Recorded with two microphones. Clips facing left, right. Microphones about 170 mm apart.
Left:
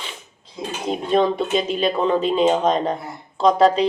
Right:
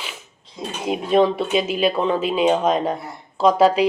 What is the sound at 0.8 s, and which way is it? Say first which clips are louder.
A woman's voice: right 2 dB; 5° right (ahead or behind).